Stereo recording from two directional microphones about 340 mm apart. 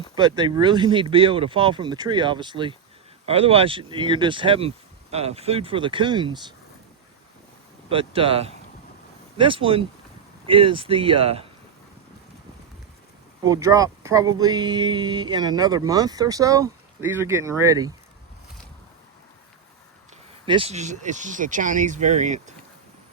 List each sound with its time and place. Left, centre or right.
0.2 s speech: centre
7.9 s speech: centre
13.4 s speech: centre
20.4 s speech: centre